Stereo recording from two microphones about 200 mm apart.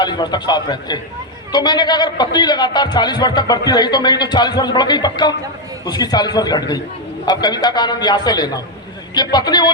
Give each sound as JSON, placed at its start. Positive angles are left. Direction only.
{"t": 0.0, "sound": "a man's voice", "side_deg": 20}